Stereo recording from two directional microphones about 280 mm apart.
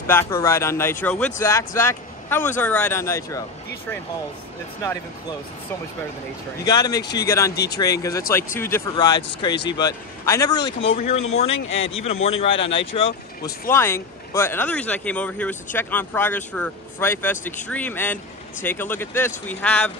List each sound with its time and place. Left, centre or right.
0.0 s speech: centre
6.6 s speech: centre